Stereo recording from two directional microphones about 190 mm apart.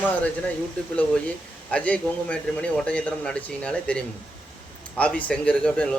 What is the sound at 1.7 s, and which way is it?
A man's voice, 5° left (ahead or behind).